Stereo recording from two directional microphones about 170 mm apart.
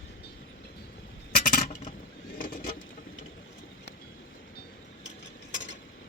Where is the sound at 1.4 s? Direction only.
50° left (ahead or behind).